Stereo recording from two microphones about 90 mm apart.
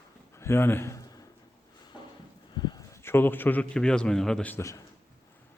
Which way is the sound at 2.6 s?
50° left (ahead or behind).